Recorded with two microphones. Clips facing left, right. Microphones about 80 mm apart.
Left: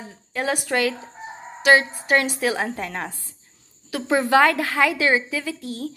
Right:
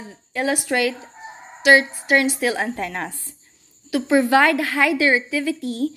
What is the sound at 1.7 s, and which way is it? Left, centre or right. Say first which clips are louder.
Speech: right 2 dB; left.